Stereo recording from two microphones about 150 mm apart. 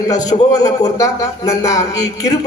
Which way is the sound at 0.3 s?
40° left (ahead or behind).